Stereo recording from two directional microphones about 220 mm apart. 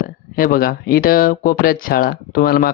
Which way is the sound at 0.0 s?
40° left (ahead or behind).